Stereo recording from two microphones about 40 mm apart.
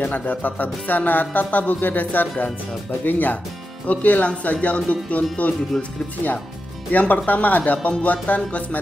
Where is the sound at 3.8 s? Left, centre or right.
Left.